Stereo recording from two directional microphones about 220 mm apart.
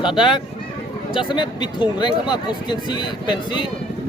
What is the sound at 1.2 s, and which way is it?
Speech, 20° left (ahead or behind).